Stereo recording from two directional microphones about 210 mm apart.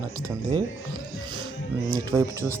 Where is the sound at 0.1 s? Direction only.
15° right (ahead or behind).